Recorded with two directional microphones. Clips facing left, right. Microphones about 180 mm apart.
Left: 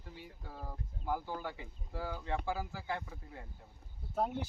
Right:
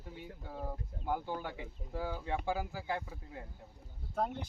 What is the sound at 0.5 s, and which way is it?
Speech, 10° right (ahead or behind).